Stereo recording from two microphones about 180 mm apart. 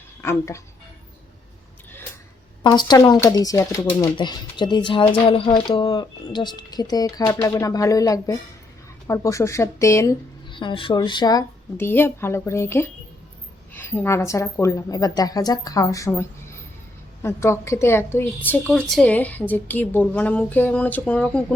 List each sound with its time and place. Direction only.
0.2 s speech: 15° left (ahead or behind)
2.6 s a woman's voice: 25° left (ahead or behind)
10.5 s a woman's voice: 25° left (ahead or behind); by 21.4 s 5° left (ahead or behind)